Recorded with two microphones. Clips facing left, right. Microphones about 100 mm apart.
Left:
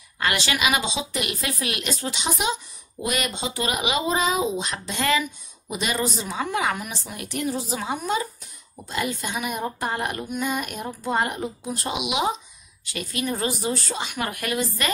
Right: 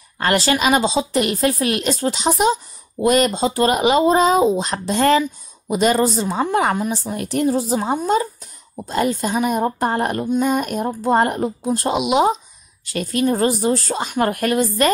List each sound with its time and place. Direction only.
0.2 s a woman's voice: 40° right (ahead or behind)